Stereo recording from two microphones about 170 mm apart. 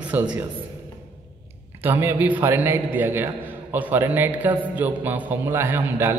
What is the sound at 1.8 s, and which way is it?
A man's voice, 10° right (ahead or behind).